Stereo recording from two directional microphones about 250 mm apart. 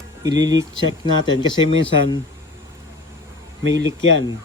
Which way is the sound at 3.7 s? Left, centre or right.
Right.